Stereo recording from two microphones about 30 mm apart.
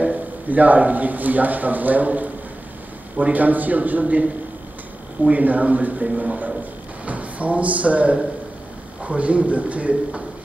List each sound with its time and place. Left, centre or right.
0.0 s a man's voice: right
3.3 s a man's voice: right
5.3 s a man's voice: right